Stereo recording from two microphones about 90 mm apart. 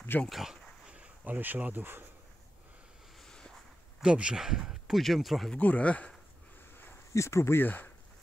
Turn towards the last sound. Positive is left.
turn(degrees=20)  # may be behind; listen again after turning